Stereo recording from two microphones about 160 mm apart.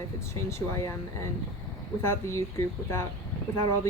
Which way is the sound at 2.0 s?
15° left (ahead or behind).